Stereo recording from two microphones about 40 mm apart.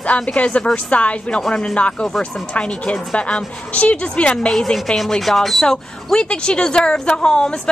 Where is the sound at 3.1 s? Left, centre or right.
Left.